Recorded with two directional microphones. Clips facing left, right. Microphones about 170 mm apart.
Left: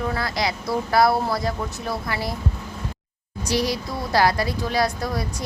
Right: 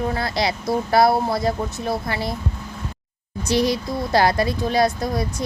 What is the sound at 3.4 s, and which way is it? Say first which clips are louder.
Speech: right 4 dB; 25° right (ahead or behind).